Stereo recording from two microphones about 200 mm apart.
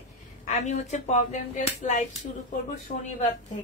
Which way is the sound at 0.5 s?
35° left (ahead or behind).